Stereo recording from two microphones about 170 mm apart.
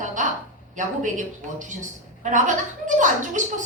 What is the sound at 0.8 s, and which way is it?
A woman's voice, 50° right (ahead or behind).